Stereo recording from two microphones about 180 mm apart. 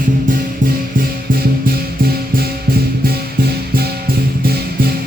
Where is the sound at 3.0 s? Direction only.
60° right (ahead or behind).